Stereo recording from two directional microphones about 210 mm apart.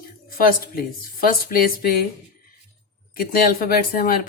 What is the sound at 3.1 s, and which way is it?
Speech, 45° left (ahead or behind).